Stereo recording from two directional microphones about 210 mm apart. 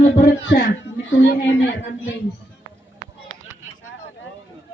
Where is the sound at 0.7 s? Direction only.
65° left (ahead or behind).